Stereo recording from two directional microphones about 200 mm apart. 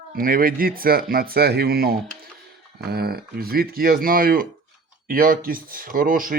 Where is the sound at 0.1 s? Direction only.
45° right (ahead or behind).